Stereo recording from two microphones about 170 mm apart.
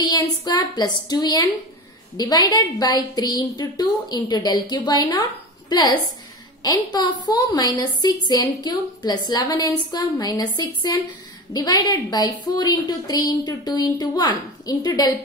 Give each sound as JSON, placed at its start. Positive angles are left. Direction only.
{"t": 0.0, "sound": "a woman's voice", "side_deg": 20}